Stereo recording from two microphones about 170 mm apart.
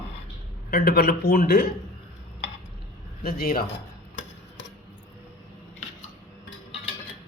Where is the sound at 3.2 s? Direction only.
65° left (ahead or behind).